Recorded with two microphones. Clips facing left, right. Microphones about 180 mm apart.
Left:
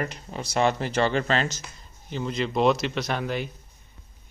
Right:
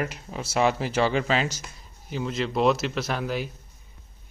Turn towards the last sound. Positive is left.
turn(degrees=0)  # may be behind; listen again after turning